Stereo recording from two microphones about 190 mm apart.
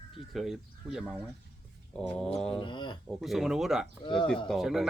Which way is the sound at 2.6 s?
25° left (ahead or behind).